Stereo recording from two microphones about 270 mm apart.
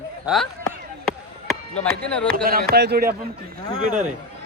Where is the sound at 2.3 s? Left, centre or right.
Right.